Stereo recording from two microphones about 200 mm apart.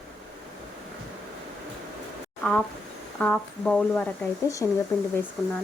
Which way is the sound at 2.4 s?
5° left (ahead or behind).